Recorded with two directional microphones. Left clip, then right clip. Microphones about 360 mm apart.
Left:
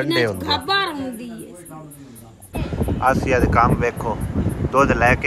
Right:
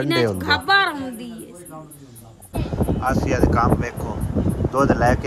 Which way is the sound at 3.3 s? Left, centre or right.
Centre.